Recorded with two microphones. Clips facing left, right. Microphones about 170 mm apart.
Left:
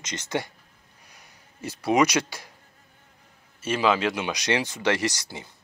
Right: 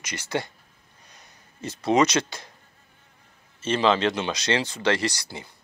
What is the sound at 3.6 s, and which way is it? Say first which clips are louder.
Speech: right 1 dB; 10° left (ahead or behind).